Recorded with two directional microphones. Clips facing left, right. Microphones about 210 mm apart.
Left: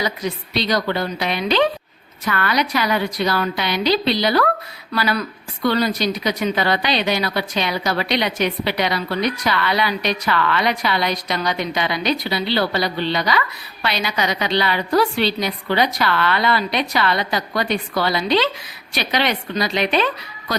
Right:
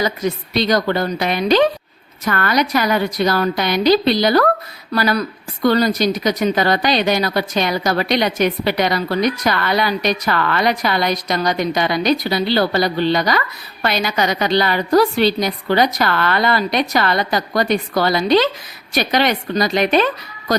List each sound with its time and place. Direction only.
0.0 s speech: 45° right (ahead or behind)